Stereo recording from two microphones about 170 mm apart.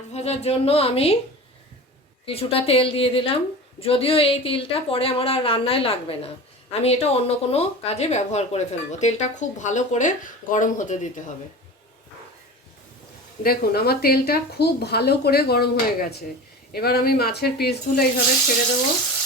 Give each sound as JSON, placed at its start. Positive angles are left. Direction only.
{"t": 0.1, "sound": "a woman's voice", "side_deg": 40}
{"t": 2.2, "sound": "a woman's voice", "side_deg": 35}
{"t": 13.4, "sound": "a woman's voice", "side_deg": 65}